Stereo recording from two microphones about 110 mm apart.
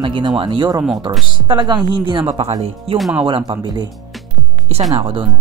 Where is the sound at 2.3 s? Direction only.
75° right (ahead or behind).